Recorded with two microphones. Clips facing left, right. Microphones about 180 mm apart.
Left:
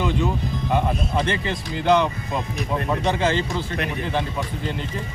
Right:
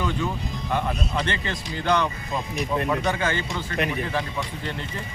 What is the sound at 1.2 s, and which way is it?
Speech, 25° left (ahead or behind).